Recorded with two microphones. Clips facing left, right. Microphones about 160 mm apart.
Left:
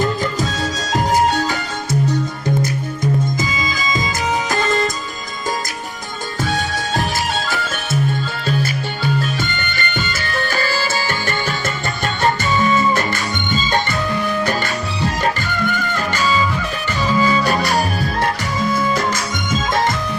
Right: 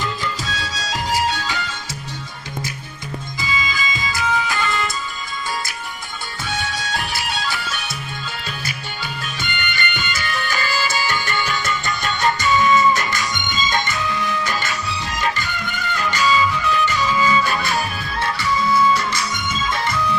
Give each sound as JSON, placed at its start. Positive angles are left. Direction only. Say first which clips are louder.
{"t": 0.0, "sound": "music", "louder": "left 7 dB", "side_deg": 45}
{"t": 3.4, "sound": "music", "louder": "left 2 dB", "side_deg": 40}
{"t": 6.5, "sound": "music", "louder": "left 3 dB", "side_deg": 40}
{"t": 9.0, "sound": "music", "louder": "left 10 dB", "side_deg": 40}